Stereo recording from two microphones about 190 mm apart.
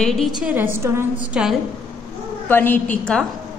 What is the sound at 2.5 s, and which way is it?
Speech, 10° left (ahead or behind).